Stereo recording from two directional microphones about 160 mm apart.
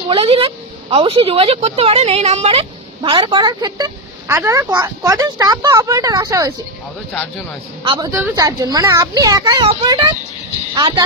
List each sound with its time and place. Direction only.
0.1 s a woman's voice: 35° right (ahead or behind)
7.8 s a woman's voice: 30° right (ahead or behind)
8.1 s speech: 15° right (ahead or behind)